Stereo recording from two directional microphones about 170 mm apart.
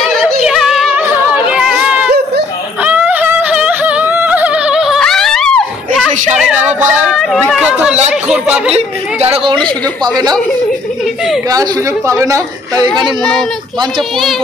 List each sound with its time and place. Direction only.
0.0 s yodeling: centre (ahead or behind)
1.5 s a sound: 5° right (ahead or behind)
7.2 s chatter: 5° left (ahead or behind)
8.1 s a sound: 5° right (ahead or behind)
8.7 s a woman's voice: 35° right (ahead or behind)
12.1 s speech: 20° right (ahead or behind)